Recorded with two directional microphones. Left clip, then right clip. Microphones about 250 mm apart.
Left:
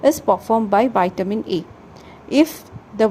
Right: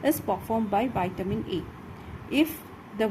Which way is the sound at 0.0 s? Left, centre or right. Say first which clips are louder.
Left 11 dB; left.